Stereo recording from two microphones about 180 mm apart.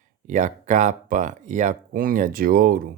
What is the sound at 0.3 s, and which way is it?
Speech, 45° right (ahead or behind).